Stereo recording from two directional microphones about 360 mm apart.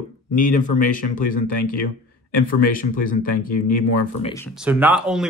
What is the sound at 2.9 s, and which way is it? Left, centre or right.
Speech, left.